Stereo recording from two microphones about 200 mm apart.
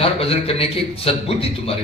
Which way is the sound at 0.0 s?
30° left (ahead or behind).